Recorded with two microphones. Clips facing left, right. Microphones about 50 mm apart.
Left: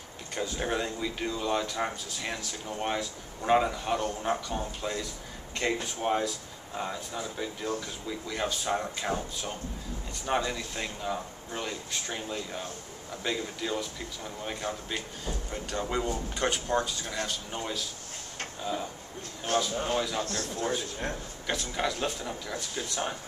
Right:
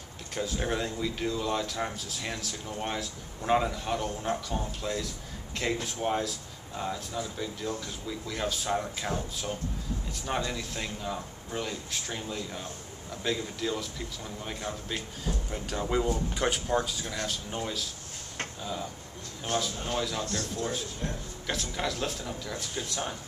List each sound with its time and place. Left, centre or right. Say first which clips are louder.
0.3 s speech: even; centre
19.9 s speech: right 1 dB; centre
20.2 s a man's voice: left 1 dB; left
21.0 s a man's voice: even; left
21.5 s speech: left 2 dB; centre